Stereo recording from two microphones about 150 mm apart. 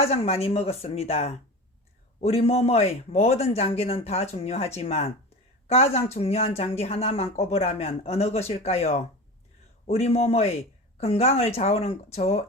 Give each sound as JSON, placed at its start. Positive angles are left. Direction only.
{"t": 0.0, "sound": "speech", "side_deg": 40}